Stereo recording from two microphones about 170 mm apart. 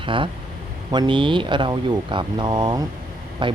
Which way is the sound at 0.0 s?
30° right (ahead or behind).